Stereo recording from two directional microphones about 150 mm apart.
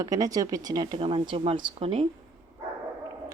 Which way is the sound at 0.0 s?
20° right (ahead or behind).